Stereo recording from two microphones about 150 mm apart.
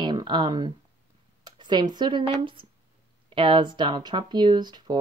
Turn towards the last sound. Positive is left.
turn(degrees=-30)  # may be behind; listen again after turning